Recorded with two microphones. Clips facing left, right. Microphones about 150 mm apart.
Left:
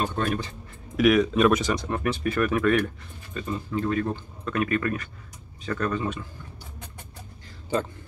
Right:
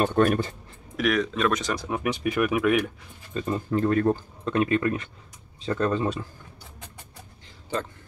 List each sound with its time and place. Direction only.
0.0 s speech: 60° right (ahead or behind)
0.9 s speech: 5° left (ahead or behind)
1.8 s speech: 10° right (ahead or behind)
3.4 s speech: 45° right (ahead or behind)
4.5 s speech: 25° right (ahead or behind)